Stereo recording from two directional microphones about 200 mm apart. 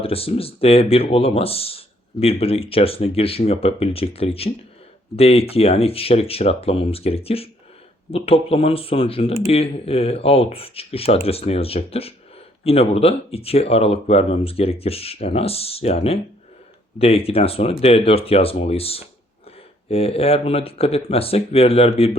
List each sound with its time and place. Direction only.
0.0 s speech: 30° left (ahead or behind)